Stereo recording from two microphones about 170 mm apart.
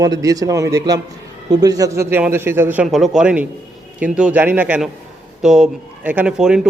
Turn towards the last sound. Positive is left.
turn(degrees=-5)  # may be behind; listen again after turning